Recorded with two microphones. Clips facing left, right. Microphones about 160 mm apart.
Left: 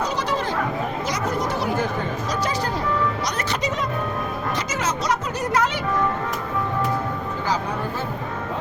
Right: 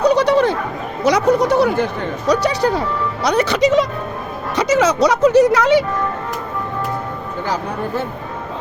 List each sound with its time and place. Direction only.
0.0 s goat: 70° right (ahead or behind)
1.0 s speech: 70° right (ahead or behind); by 3.8 s 90° right
4.6 s speech: 75° right (ahead or behind)